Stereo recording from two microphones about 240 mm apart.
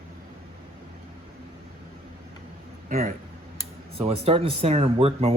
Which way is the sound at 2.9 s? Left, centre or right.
Right.